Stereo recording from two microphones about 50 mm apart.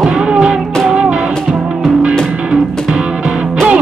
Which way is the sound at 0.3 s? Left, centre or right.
Centre.